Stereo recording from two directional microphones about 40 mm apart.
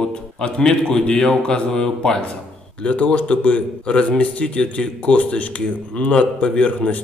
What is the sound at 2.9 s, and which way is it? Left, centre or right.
A man's voice, left.